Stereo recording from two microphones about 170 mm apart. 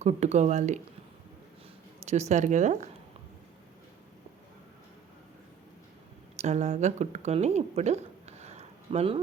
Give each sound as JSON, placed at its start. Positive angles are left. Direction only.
{"t": 0.0, "sound": "speech", "side_deg": -40}
{"t": 2.0, "sound": "speech", "side_deg": -40}
{"t": 6.3, "sound": "speech", "side_deg": -40}